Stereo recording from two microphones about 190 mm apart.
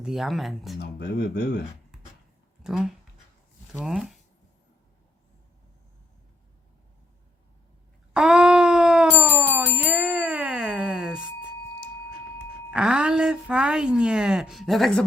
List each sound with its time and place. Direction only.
0.0 s a woman's voice: centre (ahead or behind)
0.8 s speech: 60° left (ahead or behind)
2.6 s a woman's voice: 5° right (ahead or behind)
8.1 s bicycle bell: 5° right (ahead or behind)
12.7 s a woman's voice: 5° right (ahead or behind)